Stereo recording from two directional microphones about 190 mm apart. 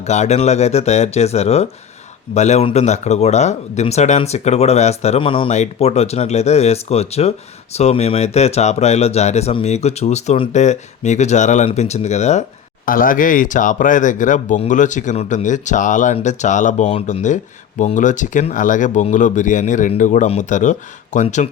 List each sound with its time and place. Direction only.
0.0 s speech: 35° left (ahead or behind)